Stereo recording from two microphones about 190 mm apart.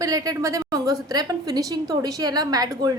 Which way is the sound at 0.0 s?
20° right (ahead or behind).